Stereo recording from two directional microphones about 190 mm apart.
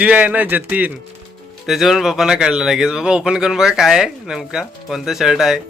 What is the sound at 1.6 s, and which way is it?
Speech, centre (ahead or behind).